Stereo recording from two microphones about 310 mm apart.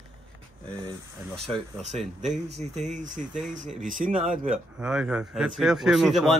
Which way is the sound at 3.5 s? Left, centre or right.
Right.